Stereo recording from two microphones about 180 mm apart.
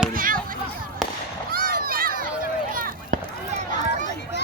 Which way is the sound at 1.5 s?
55° right (ahead or behind).